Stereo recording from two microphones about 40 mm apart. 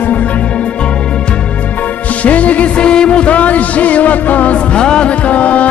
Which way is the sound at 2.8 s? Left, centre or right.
Left.